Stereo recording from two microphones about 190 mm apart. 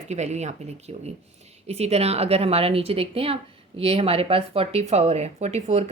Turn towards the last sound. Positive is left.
turn(degrees=-35)  # may be behind; listen again after turning